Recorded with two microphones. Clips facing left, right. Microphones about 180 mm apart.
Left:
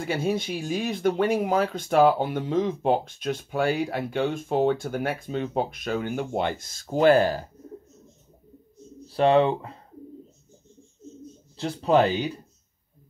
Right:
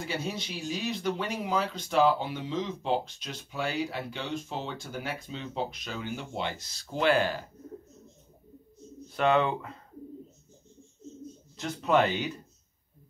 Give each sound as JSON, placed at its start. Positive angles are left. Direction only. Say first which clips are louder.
{"t": 0.0, "sound": "speech", "louder": "left 8 dB", "side_deg": 50}
{"t": 9.0, "sound": "speech", "louder": "left 6 dB", "side_deg": 35}
{"t": 11.5, "sound": "speech", "louder": "left 5 dB", "side_deg": 30}